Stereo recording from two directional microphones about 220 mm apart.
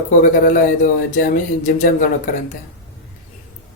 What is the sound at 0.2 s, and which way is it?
Speech, 35° left (ahead or behind).